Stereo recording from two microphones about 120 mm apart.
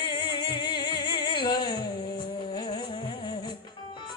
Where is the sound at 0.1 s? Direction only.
35° left (ahead or behind).